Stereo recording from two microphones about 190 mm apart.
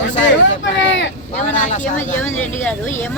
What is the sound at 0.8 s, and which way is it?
Vehicle, 70° left (ahead or behind).